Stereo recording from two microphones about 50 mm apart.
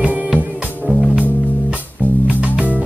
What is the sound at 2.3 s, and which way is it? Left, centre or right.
Music, right.